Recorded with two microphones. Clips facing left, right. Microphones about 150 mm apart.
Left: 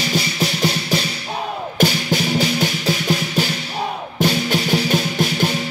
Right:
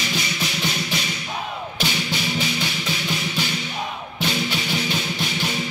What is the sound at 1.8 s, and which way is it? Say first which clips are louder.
Music: left 9 dB; 45° left (ahead or behind).